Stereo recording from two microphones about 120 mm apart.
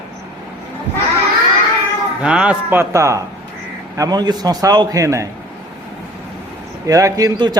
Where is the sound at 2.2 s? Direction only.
10° right (ahead or behind); by 5.2 s 25° right (ahead or behind).